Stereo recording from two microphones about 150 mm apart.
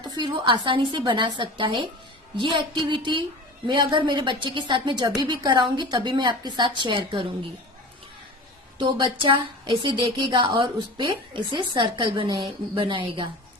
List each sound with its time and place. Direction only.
0.0 s a woman's voice: 30° right (ahead or behind)
8.8 s a woman's voice: 35° right (ahead or behind)